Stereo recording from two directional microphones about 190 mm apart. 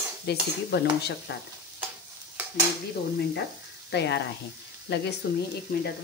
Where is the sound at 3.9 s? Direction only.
65° left (ahead or behind).